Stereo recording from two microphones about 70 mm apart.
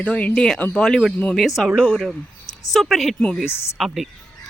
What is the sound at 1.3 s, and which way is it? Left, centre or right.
Speech, centre.